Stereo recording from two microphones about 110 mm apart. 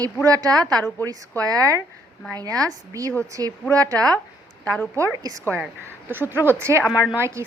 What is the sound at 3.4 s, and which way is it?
Speech, 25° left (ahead or behind).